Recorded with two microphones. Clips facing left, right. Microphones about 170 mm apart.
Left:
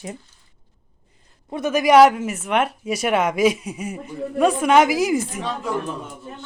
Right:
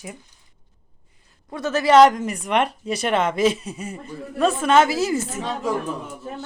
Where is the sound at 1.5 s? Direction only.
15° left (ahead or behind).